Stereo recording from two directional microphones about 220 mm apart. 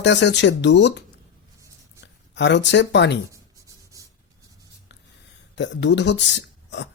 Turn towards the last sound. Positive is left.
turn(degrees=55)  # may be behind; listen again after turning